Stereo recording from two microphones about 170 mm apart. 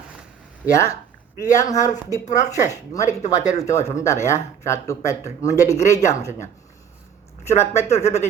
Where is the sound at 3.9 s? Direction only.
15° left (ahead or behind).